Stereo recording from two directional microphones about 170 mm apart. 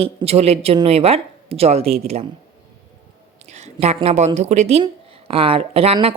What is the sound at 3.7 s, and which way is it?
Speech, 35° right (ahead or behind).